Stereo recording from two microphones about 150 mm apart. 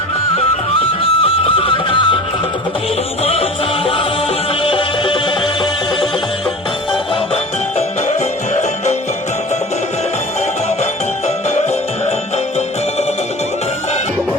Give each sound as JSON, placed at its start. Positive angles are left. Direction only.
{"t": 1.0, "sound": "music", "side_deg": 40}
{"t": 3.2, "sound": "music", "side_deg": 40}